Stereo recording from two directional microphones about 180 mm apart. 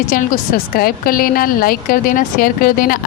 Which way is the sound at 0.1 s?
50° left (ahead or behind).